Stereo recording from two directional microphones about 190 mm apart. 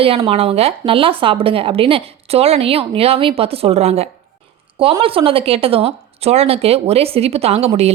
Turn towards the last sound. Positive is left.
turn(degrees=-35)  # may be behind; listen again after turning